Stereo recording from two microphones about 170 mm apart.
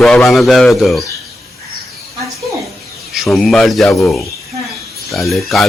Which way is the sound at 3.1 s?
Centre (ahead or behind).